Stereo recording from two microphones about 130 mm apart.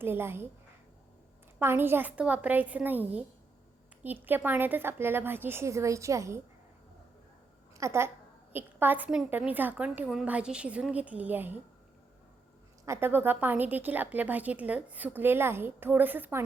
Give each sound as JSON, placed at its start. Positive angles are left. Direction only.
{"t": 0.0, "sound": "a woman's voice", "side_deg": -20}
{"t": 1.5, "sound": "a woman's voice", "side_deg": -15}
{"t": 7.8, "sound": "a woman's voice", "side_deg": -20}
{"t": 12.8, "sound": "a woman's voice", "side_deg": -20}